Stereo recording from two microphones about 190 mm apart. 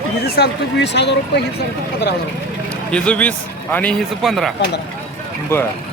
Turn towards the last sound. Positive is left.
turn(degrees=15)  # may be behind; listen again after turning